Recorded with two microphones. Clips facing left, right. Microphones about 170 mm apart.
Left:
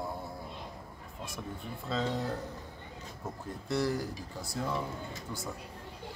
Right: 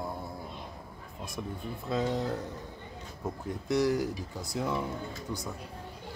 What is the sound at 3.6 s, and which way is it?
Speech, 15° right (ahead or behind).